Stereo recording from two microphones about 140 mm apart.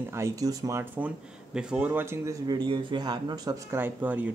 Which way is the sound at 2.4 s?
35° right (ahead or behind).